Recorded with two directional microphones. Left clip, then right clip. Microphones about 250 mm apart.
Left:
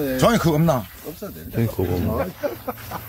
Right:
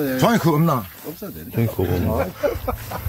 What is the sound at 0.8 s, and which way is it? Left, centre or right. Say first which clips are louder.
Speech: right 1 dB; left.